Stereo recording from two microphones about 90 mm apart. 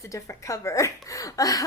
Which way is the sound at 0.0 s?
35° left (ahead or behind).